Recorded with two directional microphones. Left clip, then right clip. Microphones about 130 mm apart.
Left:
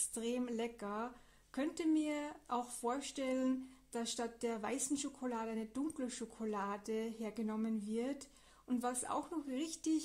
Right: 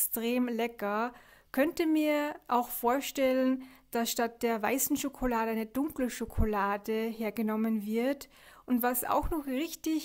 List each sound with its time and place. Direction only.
0.1 s speech: 30° right (ahead or behind)
6.5 s speech: 25° right (ahead or behind)